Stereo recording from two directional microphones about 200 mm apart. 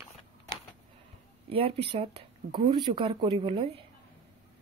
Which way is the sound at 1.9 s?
30° right (ahead or behind).